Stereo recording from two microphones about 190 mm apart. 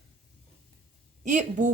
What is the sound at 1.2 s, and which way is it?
Speech, 40° right (ahead or behind).